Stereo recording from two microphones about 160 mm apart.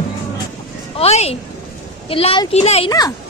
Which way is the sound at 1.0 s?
40° left (ahead or behind).